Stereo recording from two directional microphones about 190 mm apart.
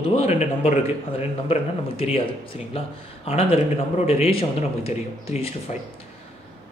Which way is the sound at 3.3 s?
30° left (ahead or behind).